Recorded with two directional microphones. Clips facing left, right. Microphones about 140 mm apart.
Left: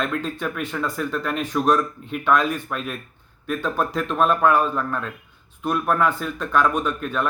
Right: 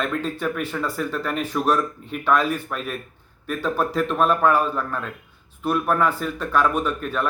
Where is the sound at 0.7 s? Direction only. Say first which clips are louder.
Even; 10° right (ahead or behind).